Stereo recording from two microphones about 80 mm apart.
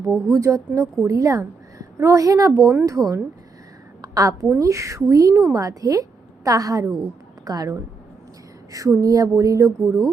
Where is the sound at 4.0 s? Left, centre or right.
Right.